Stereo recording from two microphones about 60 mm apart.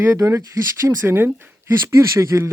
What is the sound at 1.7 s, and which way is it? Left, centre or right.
Speech, right.